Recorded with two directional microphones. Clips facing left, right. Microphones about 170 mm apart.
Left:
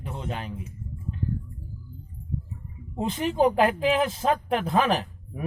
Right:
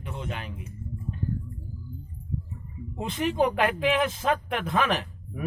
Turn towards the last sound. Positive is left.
turn(degrees=35)  # may be behind; listen again after turning